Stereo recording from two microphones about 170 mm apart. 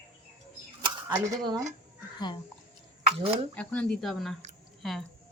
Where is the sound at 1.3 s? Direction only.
20° right (ahead or behind).